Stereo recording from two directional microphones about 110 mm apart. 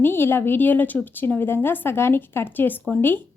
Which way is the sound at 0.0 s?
20° left (ahead or behind).